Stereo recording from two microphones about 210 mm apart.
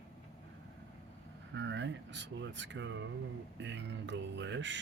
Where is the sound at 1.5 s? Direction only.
60° right (ahead or behind).